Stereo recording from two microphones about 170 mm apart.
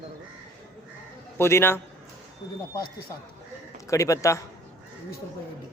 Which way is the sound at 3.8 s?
20° left (ahead or behind).